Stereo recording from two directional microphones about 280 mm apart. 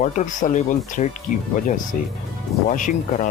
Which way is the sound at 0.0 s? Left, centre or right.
Left.